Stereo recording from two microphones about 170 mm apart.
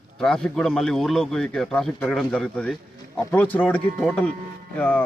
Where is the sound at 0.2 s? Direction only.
5° left (ahead or behind).